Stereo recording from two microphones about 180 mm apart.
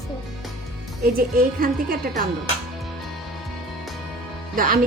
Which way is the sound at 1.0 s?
55° right (ahead or behind).